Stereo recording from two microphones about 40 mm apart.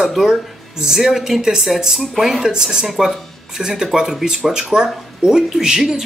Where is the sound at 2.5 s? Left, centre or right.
Centre.